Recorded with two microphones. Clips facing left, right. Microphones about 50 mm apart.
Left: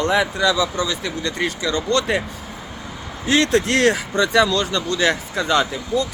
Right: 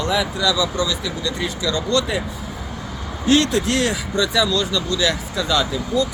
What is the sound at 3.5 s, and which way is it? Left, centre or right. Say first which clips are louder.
Speech: left 3 dB; left.